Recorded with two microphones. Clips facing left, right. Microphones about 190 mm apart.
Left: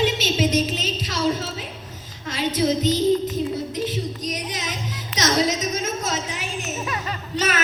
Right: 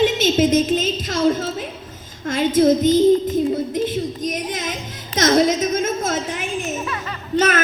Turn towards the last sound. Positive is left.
turn(degrees=-50)  # may be behind; listen again after turning